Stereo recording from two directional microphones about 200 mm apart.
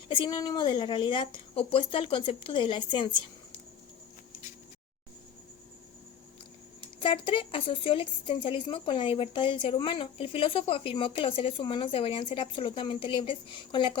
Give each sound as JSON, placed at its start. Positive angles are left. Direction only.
{"t": 0.1, "sound": "a woman's voice", "side_deg": 20}
{"t": 7.0, "sound": "a woman's voice", "side_deg": 25}